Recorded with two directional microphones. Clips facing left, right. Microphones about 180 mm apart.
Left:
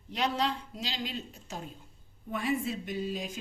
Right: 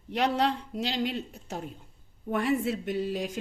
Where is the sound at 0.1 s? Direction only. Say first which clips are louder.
Right 4 dB; 60° right (ahead or behind).